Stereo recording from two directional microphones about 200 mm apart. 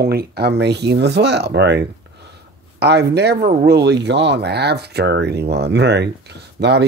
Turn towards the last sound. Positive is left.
turn(degrees=-55)  # may be behind; listen again after turning